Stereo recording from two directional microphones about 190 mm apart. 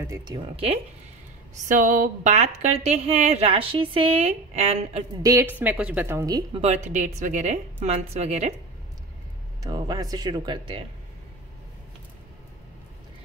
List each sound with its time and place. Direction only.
0.0 s speech: 20° right (ahead or behind)
1.7 s a woman's voice: 45° right (ahead or behind)
5.2 s speech: 15° right (ahead or behind)
6.6 s a woman's voice: 40° right (ahead or behind)
9.6 s speech: 20° right (ahead or behind)